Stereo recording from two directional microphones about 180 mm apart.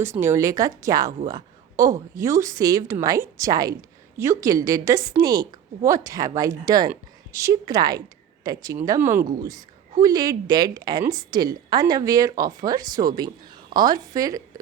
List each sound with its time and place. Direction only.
0.0 s a woman's voice: 15° right (ahead or behind)